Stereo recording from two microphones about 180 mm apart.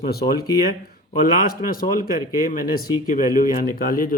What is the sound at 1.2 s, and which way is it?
Speech, 55° left (ahead or behind).